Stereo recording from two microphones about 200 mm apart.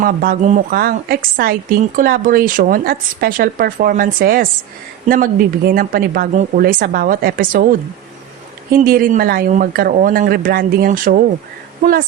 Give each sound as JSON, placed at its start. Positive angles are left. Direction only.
{"t": 0.0, "sound": "a woman's voice", "side_deg": -45}